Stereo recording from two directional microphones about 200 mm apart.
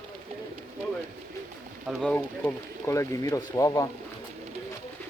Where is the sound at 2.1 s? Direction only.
10° left (ahead or behind).